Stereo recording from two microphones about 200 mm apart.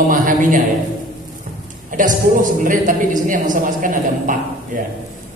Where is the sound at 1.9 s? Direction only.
40° right (ahead or behind).